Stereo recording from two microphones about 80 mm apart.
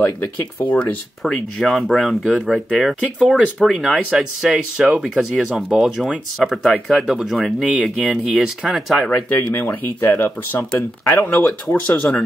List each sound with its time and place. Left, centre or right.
0.0 s speech: left
1.2 s speech: centre
9.1 s speech: left